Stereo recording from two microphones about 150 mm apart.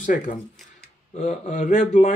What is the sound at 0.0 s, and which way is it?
A man's voice, 60° left (ahead or behind).